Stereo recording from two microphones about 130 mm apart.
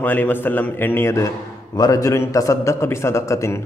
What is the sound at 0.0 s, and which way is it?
A man's voice, 15° left (ahead or behind).